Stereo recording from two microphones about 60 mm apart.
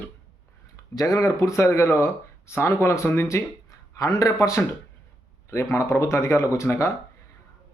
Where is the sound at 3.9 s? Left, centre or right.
Left.